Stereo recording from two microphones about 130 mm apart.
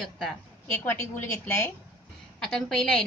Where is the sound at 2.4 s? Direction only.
5° left (ahead or behind).